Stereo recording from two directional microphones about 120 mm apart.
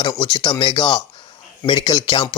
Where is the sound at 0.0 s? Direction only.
35° left (ahead or behind).